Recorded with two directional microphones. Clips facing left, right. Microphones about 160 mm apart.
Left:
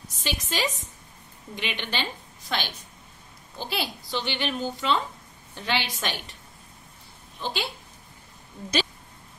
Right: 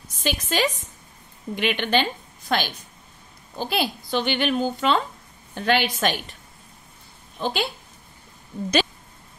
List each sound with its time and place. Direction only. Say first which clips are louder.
0.2 s a woman's voice: right 5 dB; 55° right (ahead or behind)
7.3 s a woman's voice: right 6 dB; 50° right (ahead or behind)